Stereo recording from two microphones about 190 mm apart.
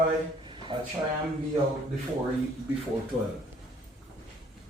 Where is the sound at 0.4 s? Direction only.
25° right (ahead or behind).